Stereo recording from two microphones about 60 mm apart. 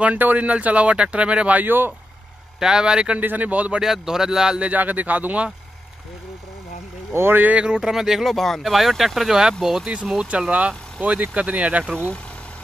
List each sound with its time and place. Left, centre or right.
0.0 s speech: right
1.6 s speech: right
2.6 s speech: centre
3.2 s speech: right
3.8 s speech: centre
4.6 s speech: right
7.1 s speech: right
7.5 s speech: centre
10.3 s speech: right